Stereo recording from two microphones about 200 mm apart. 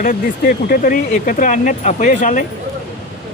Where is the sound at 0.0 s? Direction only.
45° left (ahead or behind).